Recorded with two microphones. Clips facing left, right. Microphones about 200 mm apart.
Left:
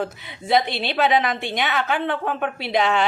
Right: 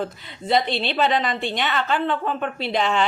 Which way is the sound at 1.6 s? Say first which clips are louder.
Left 1 dB; 15° left (ahead or behind).